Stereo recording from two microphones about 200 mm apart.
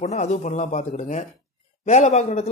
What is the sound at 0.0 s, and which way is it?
Speech, 35° left (ahead or behind).